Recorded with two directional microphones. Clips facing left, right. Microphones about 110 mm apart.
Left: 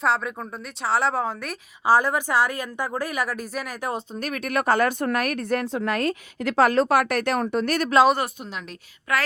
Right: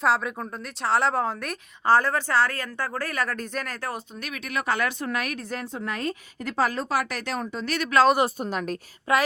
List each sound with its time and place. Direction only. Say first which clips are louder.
0.0 s a woman's voice: even; centre (ahead or behind)
3.9 s speech: left 6 dB; 40° left (ahead or behind)
8.4 s a woman's voice: right 7 dB; 45° right (ahead or behind)
9.1 s speech: right 2 dB; 30° right (ahead or behind)